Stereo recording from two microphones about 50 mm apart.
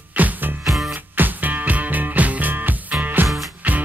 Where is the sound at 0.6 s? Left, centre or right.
Centre.